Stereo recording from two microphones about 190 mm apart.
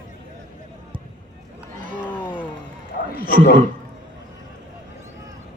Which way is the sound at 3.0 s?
50° left (ahead or behind).